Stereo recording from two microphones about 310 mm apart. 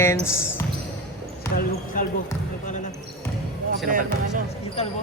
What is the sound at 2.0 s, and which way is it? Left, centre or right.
Basketball bounce, left.